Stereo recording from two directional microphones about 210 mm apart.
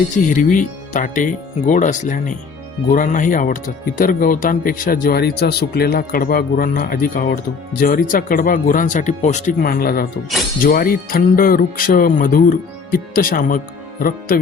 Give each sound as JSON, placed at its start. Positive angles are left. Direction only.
{"t": 0.3, "sound": "speech", "side_deg": 40}